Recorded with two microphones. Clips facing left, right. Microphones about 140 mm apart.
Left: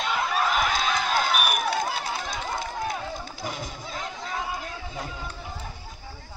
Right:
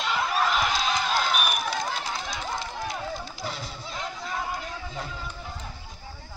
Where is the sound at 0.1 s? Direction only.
Centre (ahead or behind).